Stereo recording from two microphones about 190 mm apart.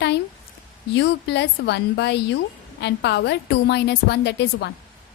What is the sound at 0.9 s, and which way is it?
A woman's voice, 65° left (ahead or behind).